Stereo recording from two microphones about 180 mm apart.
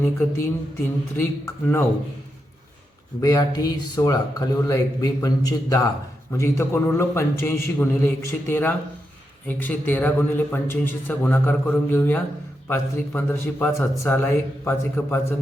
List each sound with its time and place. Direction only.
0.0 s a man's voice: 15° left (ahead or behind)
3.2 s a man's voice: 20° left (ahead or behind)